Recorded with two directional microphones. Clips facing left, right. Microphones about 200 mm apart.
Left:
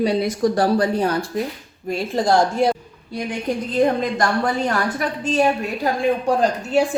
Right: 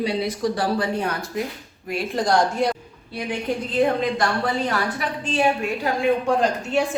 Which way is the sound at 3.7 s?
45° left (ahead or behind).